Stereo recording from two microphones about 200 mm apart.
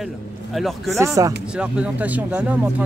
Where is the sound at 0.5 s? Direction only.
Centre (ahead or behind).